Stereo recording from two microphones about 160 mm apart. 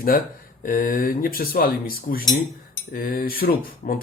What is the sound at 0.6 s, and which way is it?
Speech, 60° left (ahead or behind).